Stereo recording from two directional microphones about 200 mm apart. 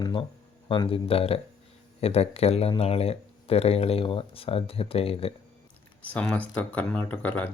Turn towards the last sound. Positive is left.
turn(degrees=10)  # may be behind; listen again after turning